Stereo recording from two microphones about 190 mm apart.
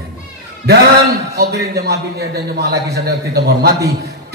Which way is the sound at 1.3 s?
55° right (ahead or behind).